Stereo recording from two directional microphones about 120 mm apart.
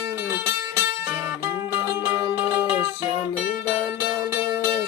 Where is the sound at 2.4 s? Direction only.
15° right (ahead or behind).